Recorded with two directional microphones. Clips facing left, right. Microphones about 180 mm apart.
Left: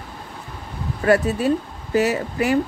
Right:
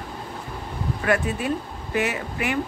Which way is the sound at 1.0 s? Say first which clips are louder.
Left 6 dB; 35° left (ahead or behind).